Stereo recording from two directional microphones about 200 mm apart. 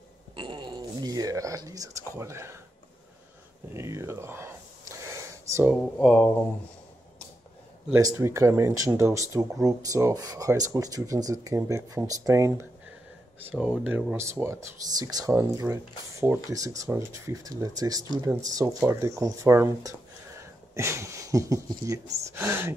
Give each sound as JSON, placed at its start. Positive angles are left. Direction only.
{"t": 0.4, "sound": "speech", "side_deg": -25}
{"t": 3.7, "sound": "a sound", "side_deg": -15}
{"t": 5.8, "sound": "speech", "side_deg": 5}
{"t": 7.9, "sound": "speech", "side_deg": -15}